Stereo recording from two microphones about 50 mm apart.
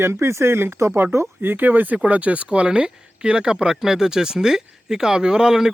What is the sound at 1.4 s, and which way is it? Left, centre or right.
Speech, right.